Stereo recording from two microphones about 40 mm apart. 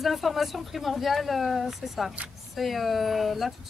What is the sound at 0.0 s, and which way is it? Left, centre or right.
Speech, centre.